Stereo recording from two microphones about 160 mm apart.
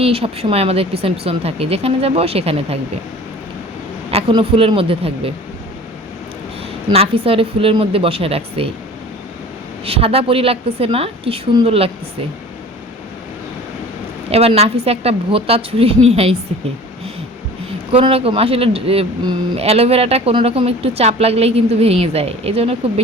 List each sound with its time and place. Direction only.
0.0 s speech: 40° right (ahead or behind)
4.1 s speech: 35° right (ahead or behind)
6.9 s speech: 35° right (ahead or behind)
9.8 s speech: 35° right (ahead or behind)
14.3 s a woman's voice: 40° right (ahead or behind)
17.9 s speech: 35° right (ahead or behind)